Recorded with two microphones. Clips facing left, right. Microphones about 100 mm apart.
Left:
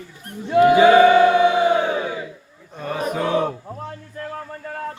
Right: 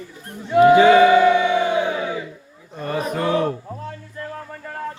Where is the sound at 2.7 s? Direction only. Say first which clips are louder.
Even; centre (ahead or behind).